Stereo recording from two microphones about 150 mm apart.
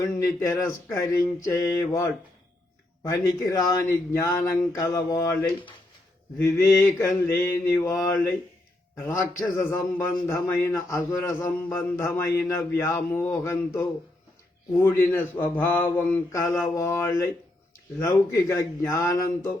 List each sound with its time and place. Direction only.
0.3 s a man's voice: 20° left (ahead or behind)
14.8 s a man's voice: 15° left (ahead or behind)